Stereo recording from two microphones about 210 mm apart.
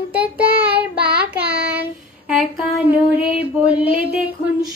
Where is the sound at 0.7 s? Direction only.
50° right (ahead or behind).